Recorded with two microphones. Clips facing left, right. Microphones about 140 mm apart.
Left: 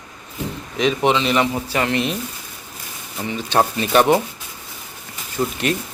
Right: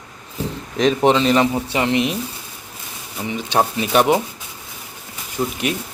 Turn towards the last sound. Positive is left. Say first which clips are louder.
# left 1 dB
turn(degrees=-5)  # may be behind; listen again after turning